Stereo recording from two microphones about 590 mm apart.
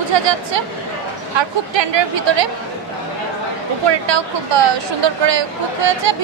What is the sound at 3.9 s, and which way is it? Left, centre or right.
Speech, right.